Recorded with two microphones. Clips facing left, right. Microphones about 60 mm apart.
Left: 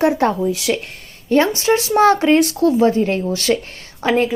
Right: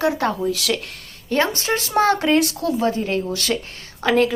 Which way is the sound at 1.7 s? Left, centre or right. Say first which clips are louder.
Left 7 dB; centre.